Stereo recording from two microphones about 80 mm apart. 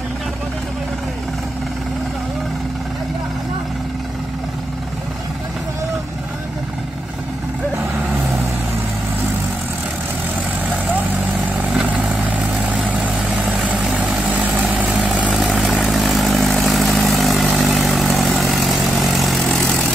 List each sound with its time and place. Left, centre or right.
12.7 s vehicle: centre
15.3 s vehicle: centre